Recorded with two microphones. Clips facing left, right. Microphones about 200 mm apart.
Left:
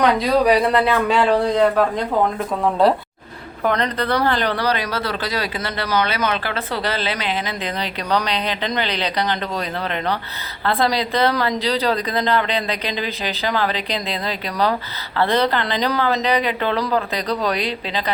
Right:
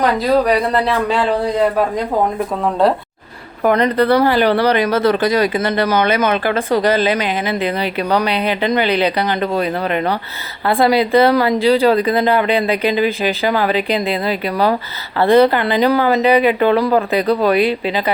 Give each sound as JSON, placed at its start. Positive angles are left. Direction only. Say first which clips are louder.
{"t": 0.0, "sound": "speech", "louder": "right 2 dB", "side_deg": 0}
{"t": 3.6, "sound": "speech", "louder": "right 7 dB", "side_deg": -10}
{"t": 4.6, "sound": "speech", "louder": "right 8 dB", "side_deg": -55}
{"t": 7.2, "sound": "speech", "louder": "right 6 dB", "side_deg": -10}